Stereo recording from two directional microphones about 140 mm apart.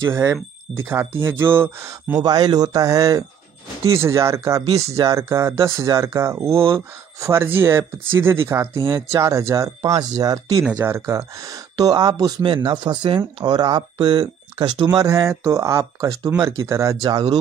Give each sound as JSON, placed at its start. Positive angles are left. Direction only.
{"t": 0.0, "sound": "speech", "side_deg": -20}
{"t": 2.2, "sound": "speech", "side_deg": -30}
{"t": 10.6, "sound": "speech", "side_deg": -10}